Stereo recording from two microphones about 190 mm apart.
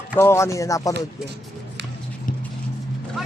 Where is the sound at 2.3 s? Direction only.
45° left (ahead or behind).